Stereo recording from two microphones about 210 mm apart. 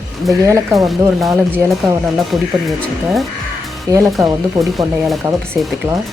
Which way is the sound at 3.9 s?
15° right (ahead or behind).